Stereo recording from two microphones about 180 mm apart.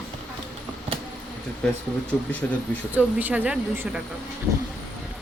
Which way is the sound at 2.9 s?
10° right (ahead or behind).